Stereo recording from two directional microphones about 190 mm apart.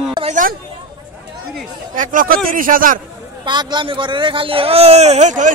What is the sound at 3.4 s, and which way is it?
Speech, 25° right (ahead or behind).